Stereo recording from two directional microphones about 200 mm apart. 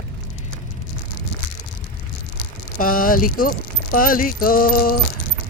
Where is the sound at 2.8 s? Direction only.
45° left (ahead or behind).